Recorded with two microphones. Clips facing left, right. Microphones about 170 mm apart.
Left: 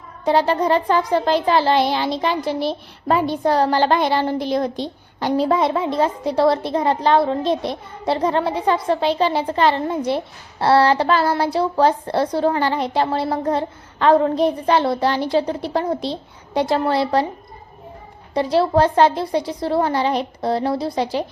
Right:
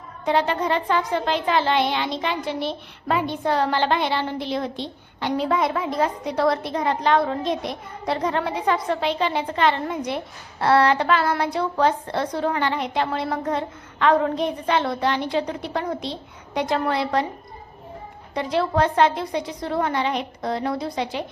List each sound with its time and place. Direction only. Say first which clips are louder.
0.3 s a child's voice: left 5 dB; 35° left (ahead or behind)
18.3 s a child's voice: left 5 dB; 35° left (ahead or behind)